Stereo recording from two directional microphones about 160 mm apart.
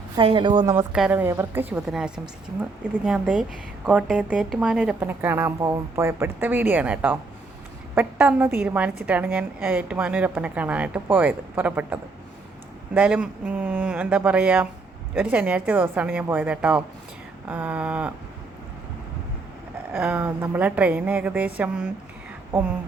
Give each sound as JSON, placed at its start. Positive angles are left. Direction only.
{"t": 0.2, "sound": "a woman's voice", "side_deg": -30}
{"t": 0.9, "sound": "a woman's voice", "side_deg": -10}
{"t": 19.9, "sound": "a woman's voice", "side_deg": -15}